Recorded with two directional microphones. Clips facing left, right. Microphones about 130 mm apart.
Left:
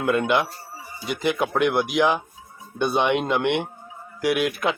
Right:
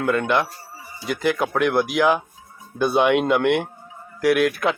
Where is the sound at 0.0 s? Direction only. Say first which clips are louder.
Even; 20° left (ahead or behind).